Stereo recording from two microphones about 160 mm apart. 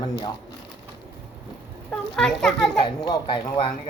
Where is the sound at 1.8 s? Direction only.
Centre (ahead or behind).